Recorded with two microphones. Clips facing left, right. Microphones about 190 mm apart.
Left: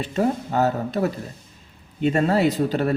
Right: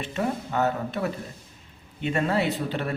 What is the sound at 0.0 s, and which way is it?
A man's voice, 35° left (ahead or behind).